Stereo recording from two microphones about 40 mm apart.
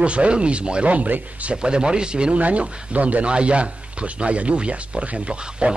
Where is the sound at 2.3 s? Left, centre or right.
Right.